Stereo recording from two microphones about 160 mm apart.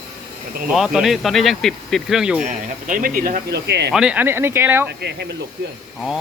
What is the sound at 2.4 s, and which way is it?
Speech, 55° right (ahead or behind).